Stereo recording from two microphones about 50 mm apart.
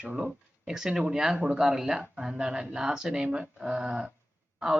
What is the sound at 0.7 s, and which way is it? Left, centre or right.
A man's voice, centre.